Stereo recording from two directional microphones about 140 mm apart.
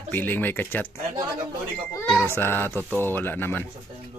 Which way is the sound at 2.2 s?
15° left (ahead or behind).